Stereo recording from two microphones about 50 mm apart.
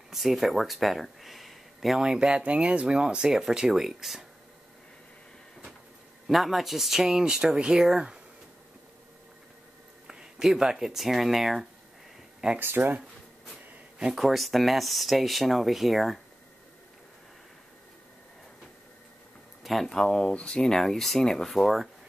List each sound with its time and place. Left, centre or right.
0.1 s speech: centre
2.0 s speech: centre
6.2 s speech: centre
10.0 s speech: centre
12.5 s speech: right
14.1 s speech: centre
19.6 s speech: centre